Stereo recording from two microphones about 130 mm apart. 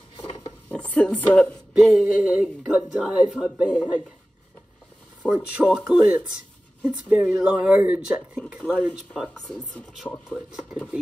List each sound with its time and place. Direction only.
0.2 s rub: 35° left (ahead or behind)
0.7 s speech: 10° left (ahead or behind)
1.9 s speech: centre (ahead or behind)
5.2 s speech: 5° left (ahead or behind)
5.9 s speech: 10° right (ahead or behind)
8.7 s speech: 5° left (ahead or behind)